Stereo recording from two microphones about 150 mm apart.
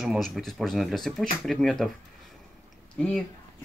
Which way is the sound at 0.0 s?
Centre (ahead or behind).